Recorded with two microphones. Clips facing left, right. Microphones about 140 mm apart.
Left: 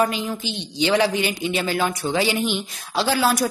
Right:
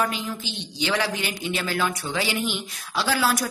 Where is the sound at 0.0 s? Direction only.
20° left (ahead or behind).